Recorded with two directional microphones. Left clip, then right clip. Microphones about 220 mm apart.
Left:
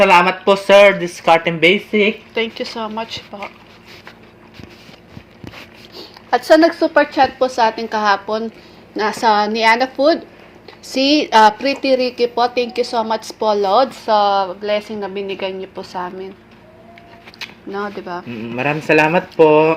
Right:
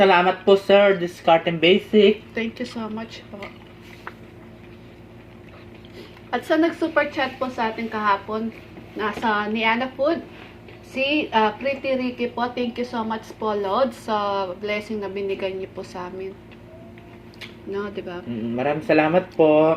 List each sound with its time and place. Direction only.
0.1 s speech: 35° left (ahead or behind)
6.3 s a woman's voice: 40° left (ahead or behind)
18.1 s speech: 35° left (ahead or behind)